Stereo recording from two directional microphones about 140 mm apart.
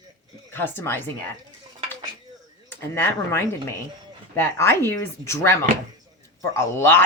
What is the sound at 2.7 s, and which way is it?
A woman's voice, 15° left (ahead or behind).